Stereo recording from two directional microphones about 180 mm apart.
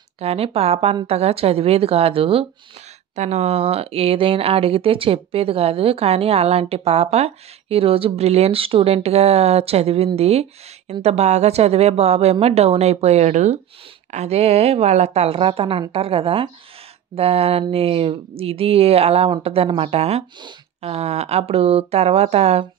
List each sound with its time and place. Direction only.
0.2 s speech: 35° right (ahead or behind)